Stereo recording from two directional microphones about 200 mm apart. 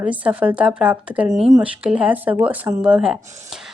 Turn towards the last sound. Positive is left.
turn(degrees=-5)  # may be behind; listen again after turning